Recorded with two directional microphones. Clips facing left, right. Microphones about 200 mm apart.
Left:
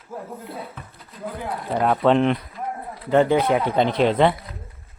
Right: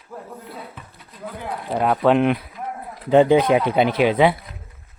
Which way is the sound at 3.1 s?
15° right (ahead or behind).